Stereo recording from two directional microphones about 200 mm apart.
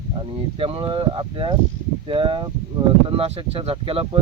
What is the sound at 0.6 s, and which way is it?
Speech, 25° right (ahead or behind).